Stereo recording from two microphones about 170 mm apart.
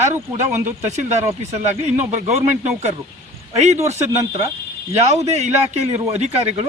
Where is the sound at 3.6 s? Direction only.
40° right (ahead or behind).